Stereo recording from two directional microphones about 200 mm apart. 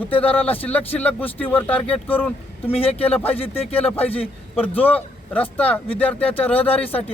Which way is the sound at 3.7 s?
10° left (ahead or behind).